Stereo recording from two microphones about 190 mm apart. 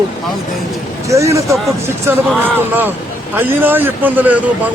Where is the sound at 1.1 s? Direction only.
15° right (ahead or behind).